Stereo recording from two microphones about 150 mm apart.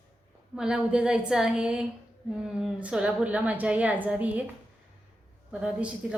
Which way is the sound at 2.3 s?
5° right (ahead or behind).